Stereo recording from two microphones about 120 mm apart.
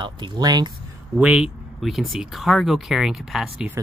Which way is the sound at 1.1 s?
10° right (ahead or behind).